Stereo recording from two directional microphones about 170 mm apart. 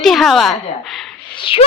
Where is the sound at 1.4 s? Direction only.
30° left (ahead or behind).